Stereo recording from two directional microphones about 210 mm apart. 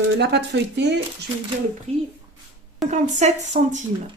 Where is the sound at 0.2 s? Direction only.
55° right (ahead or behind).